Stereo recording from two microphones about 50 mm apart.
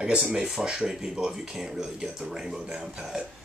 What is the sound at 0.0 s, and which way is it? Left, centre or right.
Speech, centre.